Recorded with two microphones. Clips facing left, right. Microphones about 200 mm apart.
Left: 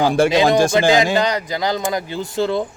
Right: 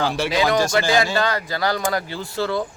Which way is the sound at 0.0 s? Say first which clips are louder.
Left 7 dB; 50° left (ahead or behind).